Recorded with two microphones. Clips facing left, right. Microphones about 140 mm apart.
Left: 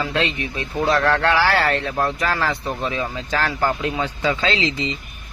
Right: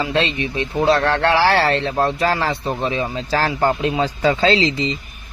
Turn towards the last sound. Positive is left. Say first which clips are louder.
# right 5 dB
turn(degrees=-35)  # may be behind; listen again after turning